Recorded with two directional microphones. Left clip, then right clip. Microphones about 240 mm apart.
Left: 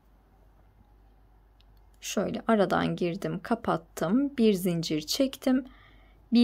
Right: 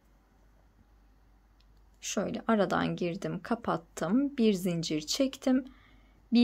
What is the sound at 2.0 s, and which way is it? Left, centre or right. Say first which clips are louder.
Speech: left 3 dB; centre.